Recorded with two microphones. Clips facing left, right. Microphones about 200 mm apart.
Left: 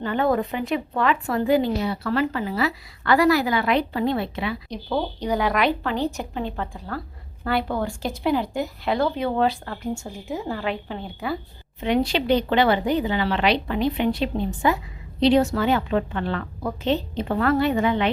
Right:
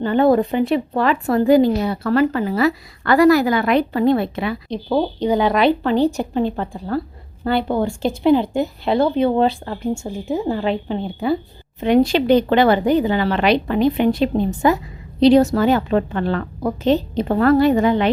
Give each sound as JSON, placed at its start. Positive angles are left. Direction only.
{"t": 0.0, "sound": "a woman's voice", "side_deg": -30}
{"t": 4.7, "sound": "speech", "side_deg": -25}
{"t": 11.8, "sound": "a woman's voice", "side_deg": -45}